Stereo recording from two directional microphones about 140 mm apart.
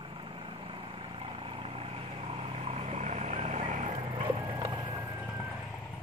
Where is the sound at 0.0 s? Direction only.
40° right (ahead or behind); by 4.0 s 60° right (ahead or behind).